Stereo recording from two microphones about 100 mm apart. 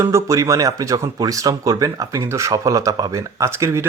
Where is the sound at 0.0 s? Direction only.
30° right (ahead or behind).